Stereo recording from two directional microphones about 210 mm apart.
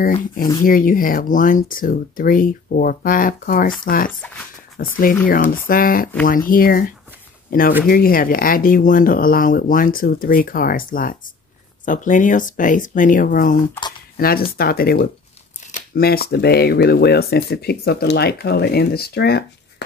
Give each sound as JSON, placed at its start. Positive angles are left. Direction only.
{"t": 0.7, "sound": "speech", "side_deg": 40}